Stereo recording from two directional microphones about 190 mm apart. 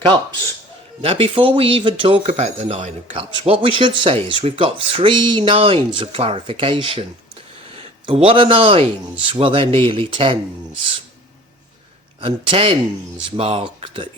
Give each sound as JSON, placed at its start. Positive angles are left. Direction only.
{"t": 1.0, "sound": "speech", "side_deg": -30}
{"t": 12.2, "sound": "speech", "side_deg": -25}